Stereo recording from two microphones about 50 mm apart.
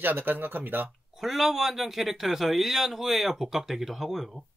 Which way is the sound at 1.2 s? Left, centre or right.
Centre.